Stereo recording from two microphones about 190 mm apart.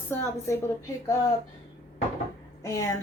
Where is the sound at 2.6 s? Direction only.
15° left (ahead or behind).